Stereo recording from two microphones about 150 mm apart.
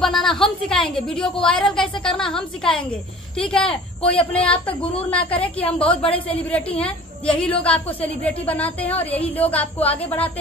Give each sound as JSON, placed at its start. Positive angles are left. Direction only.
{"t": 0.0, "sound": "a woman's voice", "side_deg": 0}
{"t": 6.0, "sound": "a woman's voice", "side_deg": 40}
{"t": 6.8, "sound": "a woman's voice", "side_deg": 10}